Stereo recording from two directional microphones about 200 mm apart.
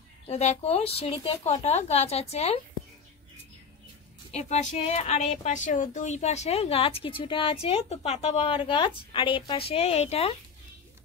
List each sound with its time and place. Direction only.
0.3 s a woman's voice: 35° left (ahead or behind)
4.3 s a woman's voice: 35° left (ahead or behind)